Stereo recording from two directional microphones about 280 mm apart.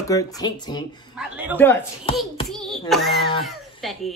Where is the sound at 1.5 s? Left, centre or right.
Centre.